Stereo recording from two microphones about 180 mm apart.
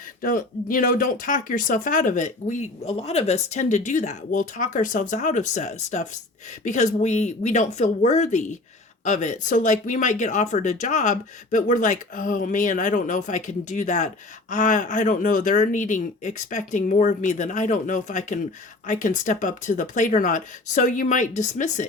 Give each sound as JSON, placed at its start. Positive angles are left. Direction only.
{"t": 0.2, "sound": "speech", "side_deg": 50}